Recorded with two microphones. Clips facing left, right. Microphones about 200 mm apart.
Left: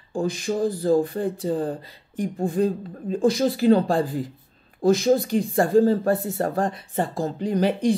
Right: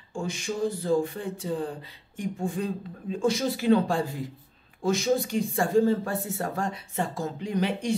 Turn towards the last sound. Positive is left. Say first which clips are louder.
# left 6 dB
turn(degrees=35)  # may be behind; listen again after turning